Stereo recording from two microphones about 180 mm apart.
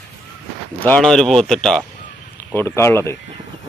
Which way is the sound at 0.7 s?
10° left (ahead or behind).